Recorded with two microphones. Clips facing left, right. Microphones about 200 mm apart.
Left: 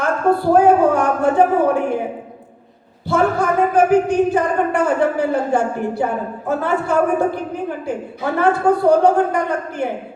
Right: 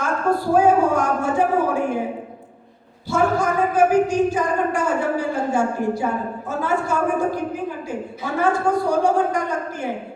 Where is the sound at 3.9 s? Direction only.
60° left (ahead or behind).